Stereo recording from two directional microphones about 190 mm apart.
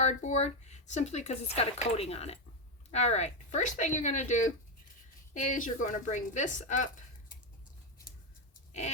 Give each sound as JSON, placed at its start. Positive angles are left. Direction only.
{"t": 0.0, "sound": "speech", "side_deg": 40}